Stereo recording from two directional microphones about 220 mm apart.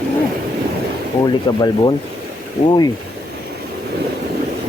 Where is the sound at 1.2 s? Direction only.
20° left (ahead or behind).